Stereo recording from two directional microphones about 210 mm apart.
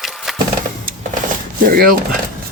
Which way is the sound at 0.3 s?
Centre (ahead or behind).